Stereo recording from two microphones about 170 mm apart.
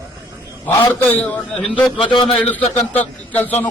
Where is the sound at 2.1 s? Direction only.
30° left (ahead or behind).